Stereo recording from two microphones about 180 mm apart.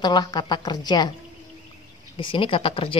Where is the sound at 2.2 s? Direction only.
30° left (ahead or behind).